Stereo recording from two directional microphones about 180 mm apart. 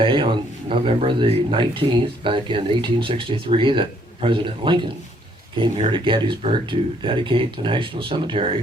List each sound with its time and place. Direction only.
0.0 s speech: 30° right (ahead or behind)